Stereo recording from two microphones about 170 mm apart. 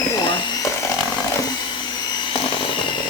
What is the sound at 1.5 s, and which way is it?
Vacuum cleaner, 25° left (ahead or behind).